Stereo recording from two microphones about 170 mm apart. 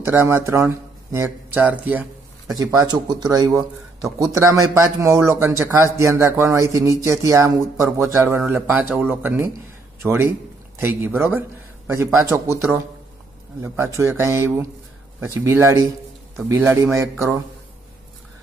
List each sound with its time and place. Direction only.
0.0 s speech: 15° right (ahead or behind)
2.6 s speech: 20° right (ahead or behind)
8.4 s speech: 5° right (ahead or behind)